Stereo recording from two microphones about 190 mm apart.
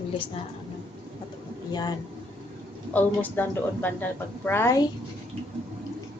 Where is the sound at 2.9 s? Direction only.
10° left (ahead or behind).